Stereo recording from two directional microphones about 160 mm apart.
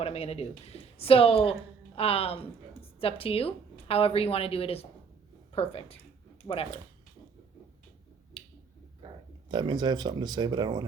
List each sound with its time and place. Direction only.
0.0 s a woman's voice: 40° left (ahead or behind)
8.4 s finger snapping: 35° left (ahead or behind)
9.5 s speech: 25° right (ahead or behind)